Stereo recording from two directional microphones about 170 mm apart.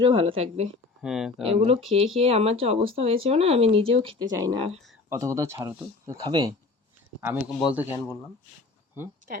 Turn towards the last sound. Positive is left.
turn(degrees=-10)  # may be behind; listen again after turning